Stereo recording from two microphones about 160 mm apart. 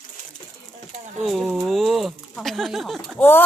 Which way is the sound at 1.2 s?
Centre (ahead or behind).